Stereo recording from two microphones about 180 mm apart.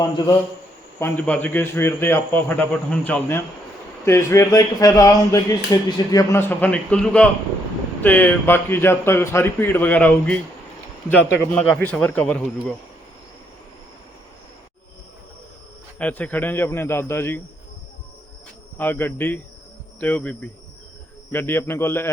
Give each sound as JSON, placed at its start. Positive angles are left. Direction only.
{"t": 0.9, "sound": "speech", "side_deg": 10}
{"t": 11.5, "sound": "speech", "side_deg": 5}
{"t": 16.0, "sound": "speech", "side_deg": 10}
{"t": 18.8, "sound": "speech", "side_deg": 10}
{"t": 21.3, "sound": "speech", "side_deg": 10}